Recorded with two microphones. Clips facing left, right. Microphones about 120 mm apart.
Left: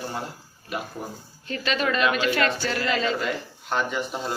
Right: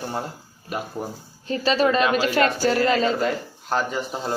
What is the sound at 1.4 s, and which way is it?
Speech, 35° right (ahead or behind).